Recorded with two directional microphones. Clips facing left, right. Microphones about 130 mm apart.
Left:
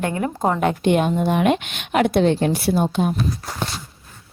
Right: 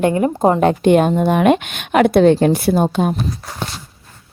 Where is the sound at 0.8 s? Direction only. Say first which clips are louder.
Right 5 dB; 45° right (ahead or behind).